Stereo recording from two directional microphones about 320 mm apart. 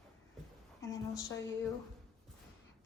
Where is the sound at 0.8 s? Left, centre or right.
Centre.